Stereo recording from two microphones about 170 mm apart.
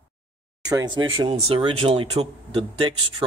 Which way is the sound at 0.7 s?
20° right (ahead or behind).